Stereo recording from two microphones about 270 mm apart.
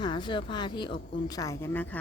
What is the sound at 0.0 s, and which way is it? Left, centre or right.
Speech, centre.